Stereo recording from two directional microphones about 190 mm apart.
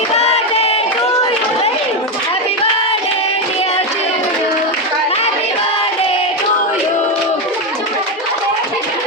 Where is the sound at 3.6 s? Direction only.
35° left (ahead or behind).